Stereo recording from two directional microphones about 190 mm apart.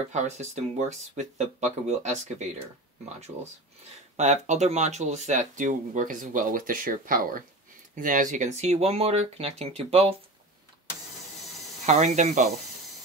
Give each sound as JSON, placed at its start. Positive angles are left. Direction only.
{"t": 0.1, "sound": "speech", "side_deg": -35}
{"t": 4.2, "sound": "speech", "side_deg": -40}
{"t": 11.8, "sound": "speech", "side_deg": -40}